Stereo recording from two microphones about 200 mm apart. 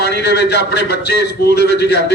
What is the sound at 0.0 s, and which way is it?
A man's voice, 55° left (ahead or behind).